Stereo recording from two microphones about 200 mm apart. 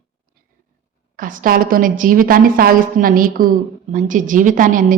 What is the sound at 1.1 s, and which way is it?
A woman's voice, 45° right (ahead or behind).